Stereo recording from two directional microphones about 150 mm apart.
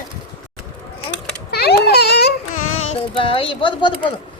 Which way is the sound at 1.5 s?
90° left.